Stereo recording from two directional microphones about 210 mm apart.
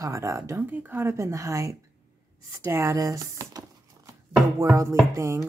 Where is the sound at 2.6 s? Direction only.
15° right (ahead or behind).